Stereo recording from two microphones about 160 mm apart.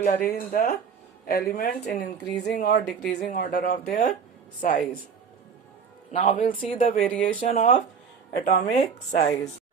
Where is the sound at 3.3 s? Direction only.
60° left (ahead or behind).